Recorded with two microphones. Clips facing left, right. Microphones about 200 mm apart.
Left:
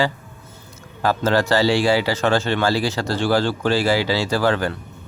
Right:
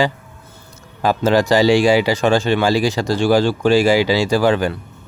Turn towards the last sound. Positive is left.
turn(degrees=-15)  # may be behind; listen again after turning